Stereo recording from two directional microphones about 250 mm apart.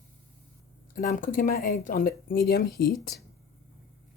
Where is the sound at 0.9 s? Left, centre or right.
Left.